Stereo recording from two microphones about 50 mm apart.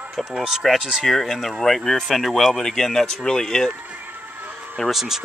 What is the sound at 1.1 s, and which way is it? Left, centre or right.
Speech, centre.